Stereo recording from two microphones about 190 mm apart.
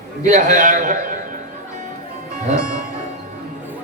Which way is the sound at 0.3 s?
45° right (ahead or behind).